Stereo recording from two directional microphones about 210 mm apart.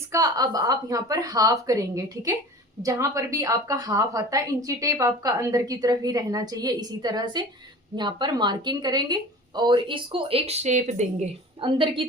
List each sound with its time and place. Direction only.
0.1 s a woman's voice: 15° right (ahead or behind); by 11.0 s 35° right (ahead or behind)
11.6 s speech: 25° right (ahead or behind)